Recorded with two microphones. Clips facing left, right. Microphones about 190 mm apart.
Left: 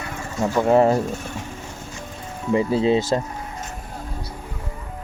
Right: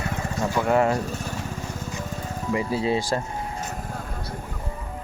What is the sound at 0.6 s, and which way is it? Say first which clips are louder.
Speech: left 5 dB; 30° left (ahead or behind).